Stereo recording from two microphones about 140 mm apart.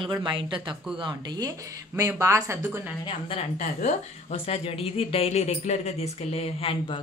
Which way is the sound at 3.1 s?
40° left (ahead or behind).